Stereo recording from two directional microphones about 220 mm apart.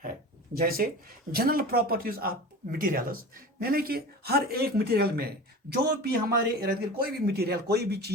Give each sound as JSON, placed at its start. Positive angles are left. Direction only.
{"t": 0.5, "sound": "a man's voice", "side_deg": -40}